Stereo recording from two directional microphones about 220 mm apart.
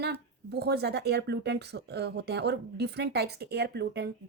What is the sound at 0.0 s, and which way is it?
Speech, 50° right (ahead or behind).